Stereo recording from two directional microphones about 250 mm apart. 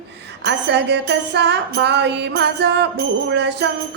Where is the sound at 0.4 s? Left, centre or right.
Right.